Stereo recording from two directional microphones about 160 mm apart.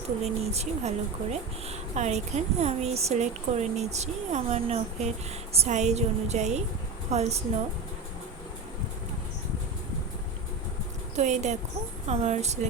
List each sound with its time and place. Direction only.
0.2 s speech: 40° right (ahead or behind)
11.2 s speech: 45° right (ahead or behind)